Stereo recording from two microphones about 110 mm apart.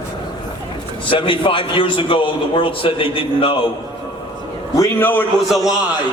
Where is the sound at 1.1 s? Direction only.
50° left (ahead or behind).